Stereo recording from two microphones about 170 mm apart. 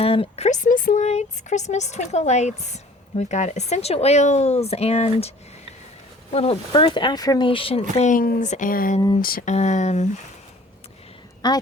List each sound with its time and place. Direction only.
0.0 s speech: 35° left (ahead or behind)
6.3 s speech: 35° left (ahead or behind); by 9.0 s 55° left (ahead or behind)
9.2 s a sound: 60° left (ahead or behind)
9.5 s speech: 40° left (ahead or behind)
11.4 s a woman's voice: 25° left (ahead or behind)